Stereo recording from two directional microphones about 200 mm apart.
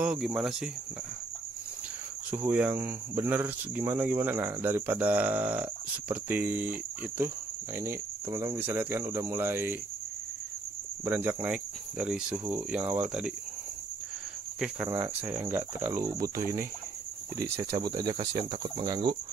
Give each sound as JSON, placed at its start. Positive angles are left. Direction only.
{"t": 0.0, "sound": "cricket", "side_deg": -5}
{"t": 2.3, "sound": "speech", "side_deg": -10}
{"t": 11.1, "sound": "speech", "side_deg": -10}
{"t": 14.9, "sound": "speech", "side_deg": -15}
{"t": 17.8, "sound": "speech", "side_deg": -20}